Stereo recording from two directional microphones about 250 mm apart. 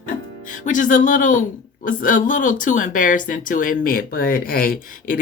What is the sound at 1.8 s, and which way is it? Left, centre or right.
Speech, left.